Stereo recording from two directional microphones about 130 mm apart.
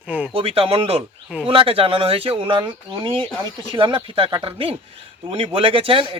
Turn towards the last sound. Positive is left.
turn(degrees=-45)  # may be behind; listen again after turning